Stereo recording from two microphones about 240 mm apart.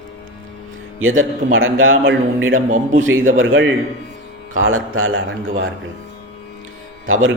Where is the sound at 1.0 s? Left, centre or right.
Right.